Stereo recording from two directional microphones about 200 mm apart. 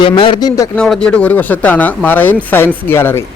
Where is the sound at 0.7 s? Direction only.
5° left (ahead or behind).